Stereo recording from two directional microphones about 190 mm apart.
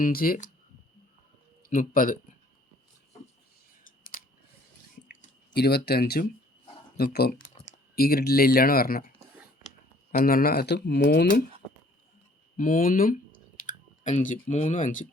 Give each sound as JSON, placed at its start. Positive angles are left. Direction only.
{"t": 0.0, "sound": "speech", "side_deg": 50}
{"t": 1.7, "sound": "speech", "side_deg": 45}
{"t": 4.1, "sound": "a sound", "side_deg": 45}
{"t": 5.5, "sound": "speech", "side_deg": 60}
{"t": 7.3, "sound": "a sound", "side_deg": 35}
{"t": 7.9, "sound": "speech", "side_deg": 55}
{"t": 10.1, "sound": "speech", "side_deg": 50}
{"t": 12.5, "sound": "speech", "side_deg": 45}